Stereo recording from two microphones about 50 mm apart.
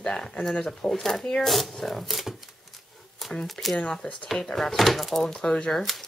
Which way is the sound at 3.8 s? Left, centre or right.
Centre.